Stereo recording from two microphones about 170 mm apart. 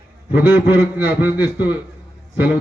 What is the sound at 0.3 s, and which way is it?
A man's voice, 10° right (ahead or behind).